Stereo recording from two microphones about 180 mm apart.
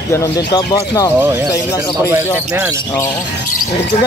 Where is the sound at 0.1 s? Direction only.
20° left (ahead or behind).